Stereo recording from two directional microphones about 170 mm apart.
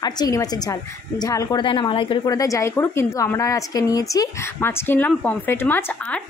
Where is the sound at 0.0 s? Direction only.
20° left (ahead or behind).